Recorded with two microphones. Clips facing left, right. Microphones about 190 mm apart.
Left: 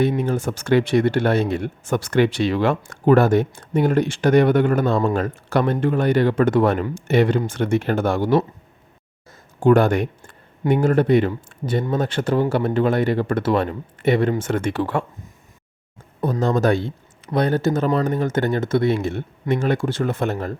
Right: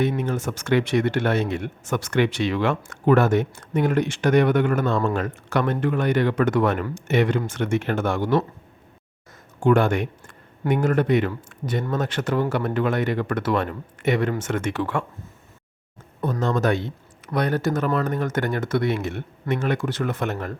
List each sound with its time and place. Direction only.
0.2 s speech: 35° left (ahead or behind)
9.6 s speech: 40° left (ahead or behind)
16.4 s speech: 35° left (ahead or behind)